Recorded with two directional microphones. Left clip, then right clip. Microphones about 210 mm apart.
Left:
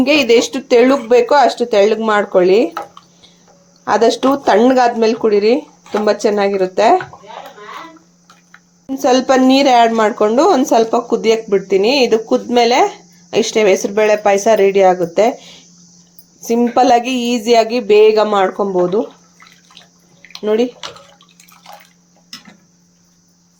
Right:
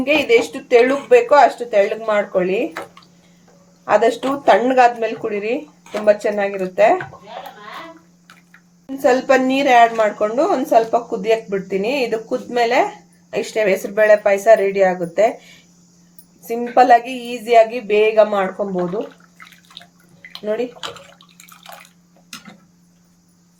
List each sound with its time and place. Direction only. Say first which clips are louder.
0.0 s a woman's voice: left 4 dB; 35° left (ahead or behind)
3.8 s a woman's voice: left 3 dB; 35° left (ahead or behind)
9.0 s a woman's voice: left 2 dB; 35° left (ahead or behind)
20.4 s a woman's voice: left 7 dB; 40° left (ahead or behind)